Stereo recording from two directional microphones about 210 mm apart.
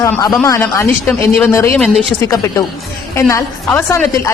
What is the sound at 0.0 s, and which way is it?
A woman's voice, 15° left (ahead or behind).